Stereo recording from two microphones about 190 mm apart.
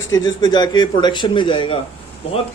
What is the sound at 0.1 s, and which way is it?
A man's voice, 20° left (ahead or behind).